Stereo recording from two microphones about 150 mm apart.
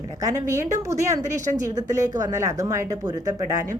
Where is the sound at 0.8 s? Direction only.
20° right (ahead or behind).